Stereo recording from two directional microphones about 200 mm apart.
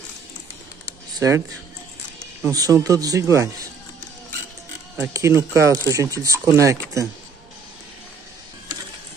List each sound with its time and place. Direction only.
2.4 s speech: 15° right (ahead or behind)
4.9 s speech: 15° right (ahead or behind)